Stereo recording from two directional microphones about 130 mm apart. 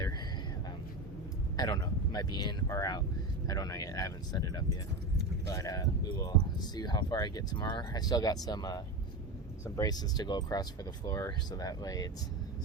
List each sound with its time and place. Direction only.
1.5 s speech: 30° left (ahead or behind)